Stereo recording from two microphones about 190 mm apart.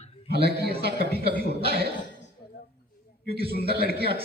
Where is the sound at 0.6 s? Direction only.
55° right (ahead or behind).